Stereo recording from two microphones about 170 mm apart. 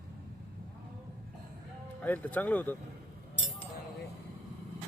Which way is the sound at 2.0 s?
10° left (ahead or behind).